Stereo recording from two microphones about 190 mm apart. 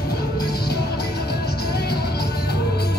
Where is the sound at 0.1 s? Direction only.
55° left (ahead or behind).